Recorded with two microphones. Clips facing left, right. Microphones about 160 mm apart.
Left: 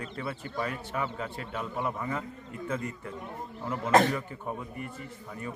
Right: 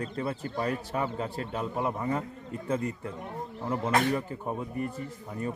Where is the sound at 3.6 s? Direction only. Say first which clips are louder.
Left 3 dB; 30° right (ahead or behind).